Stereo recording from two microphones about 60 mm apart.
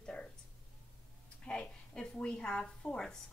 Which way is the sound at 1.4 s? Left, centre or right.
Centre.